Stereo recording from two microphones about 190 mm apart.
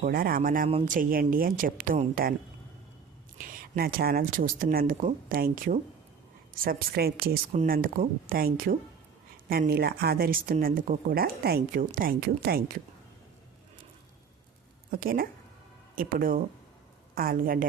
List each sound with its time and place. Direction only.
0.0 s speech: 50° right (ahead or behind)
3.3 s speech: 50° right (ahead or behind)
14.8 s speech: 50° right (ahead or behind)